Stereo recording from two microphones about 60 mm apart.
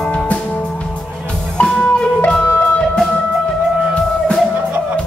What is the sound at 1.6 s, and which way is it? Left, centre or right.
Music, centre.